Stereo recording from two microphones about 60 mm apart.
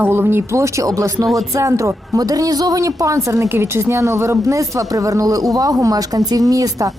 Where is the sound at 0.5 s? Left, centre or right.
Right.